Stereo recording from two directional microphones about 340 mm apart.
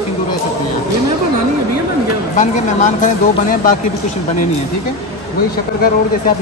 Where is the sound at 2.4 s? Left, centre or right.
Left.